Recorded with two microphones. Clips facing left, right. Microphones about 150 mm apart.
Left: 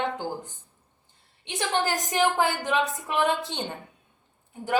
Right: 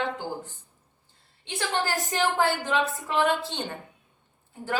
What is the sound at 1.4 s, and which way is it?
A woman's voice, 20° left (ahead or behind).